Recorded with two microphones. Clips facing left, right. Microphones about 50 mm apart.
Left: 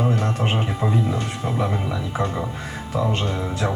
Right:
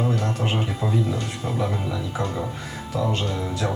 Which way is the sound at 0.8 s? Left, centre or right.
Left.